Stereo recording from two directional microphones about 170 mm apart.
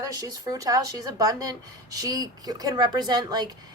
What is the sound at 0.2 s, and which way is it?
A woman's voice, 20° right (ahead or behind).